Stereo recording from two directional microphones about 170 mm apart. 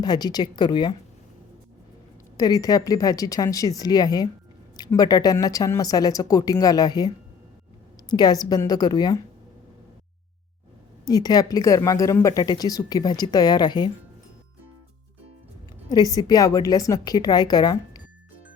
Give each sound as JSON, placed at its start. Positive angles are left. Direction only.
{"t": 0.0, "sound": "a woman's voice", "side_deg": 25}
{"t": 2.4, "sound": "a woman's voice", "side_deg": 20}
{"t": 8.1, "sound": "a woman's voice", "side_deg": 25}
{"t": 11.0, "sound": "a woman's voice", "side_deg": 20}
{"t": 15.9, "sound": "a woman's voice", "side_deg": 20}